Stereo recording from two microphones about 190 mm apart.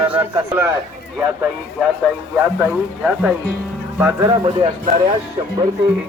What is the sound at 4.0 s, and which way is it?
Speech, 10° right (ahead or behind).